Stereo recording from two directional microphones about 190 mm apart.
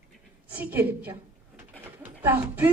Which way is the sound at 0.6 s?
10° right (ahead or behind).